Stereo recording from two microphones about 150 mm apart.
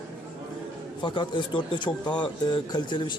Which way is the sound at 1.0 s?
30° left (ahead or behind).